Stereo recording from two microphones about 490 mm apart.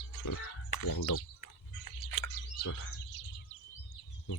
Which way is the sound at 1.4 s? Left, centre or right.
Left.